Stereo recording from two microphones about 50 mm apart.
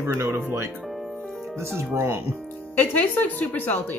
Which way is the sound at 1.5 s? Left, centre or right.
Right.